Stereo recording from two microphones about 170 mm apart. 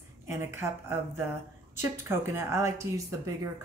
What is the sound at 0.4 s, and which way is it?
Speech, 15° right (ahead or behind).